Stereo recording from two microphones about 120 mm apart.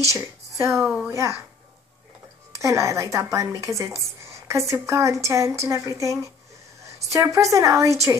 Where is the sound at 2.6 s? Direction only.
25° right (ahead or behind).